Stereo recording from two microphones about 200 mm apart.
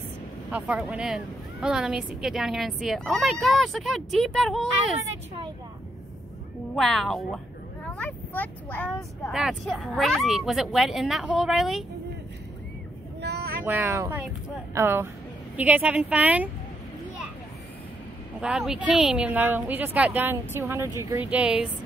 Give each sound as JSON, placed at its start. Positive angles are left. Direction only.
{"t": 0.5, "sound": "a woman's voice", "side_deg": -5}
{"t": 6.7, "sound": "a woman's voice", "side_deg": 0}
{"t": 13.2, "sound": "vehicle", "side_deg": -55}
{"t": 13.7, "sound": "speech", "side_deg": -10}
{"t": 18.4, "sound": "a woman's voice", "side_deg": -5}